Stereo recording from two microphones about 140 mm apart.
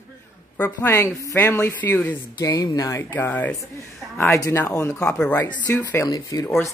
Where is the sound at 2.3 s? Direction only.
25° left (ahead or behind).